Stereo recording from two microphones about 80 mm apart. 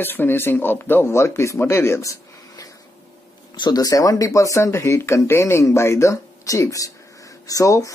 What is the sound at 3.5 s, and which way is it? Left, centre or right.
Speech, left.